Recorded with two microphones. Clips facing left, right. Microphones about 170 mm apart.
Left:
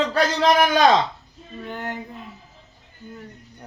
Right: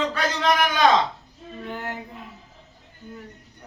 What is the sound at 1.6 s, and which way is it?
Speech, 5° right (ahead or behind).